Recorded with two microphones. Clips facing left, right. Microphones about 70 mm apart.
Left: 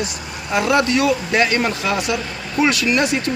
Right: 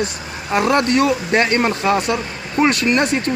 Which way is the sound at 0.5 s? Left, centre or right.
Right.